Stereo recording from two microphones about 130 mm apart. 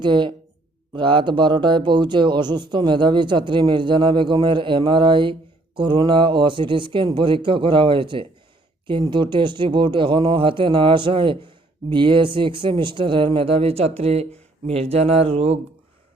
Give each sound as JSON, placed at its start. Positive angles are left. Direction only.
{"t": 0.0, "sound": "a man's voice", "side_deg": -35}